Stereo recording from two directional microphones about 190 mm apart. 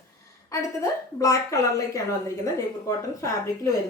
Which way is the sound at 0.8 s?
15° left (ahead or behind).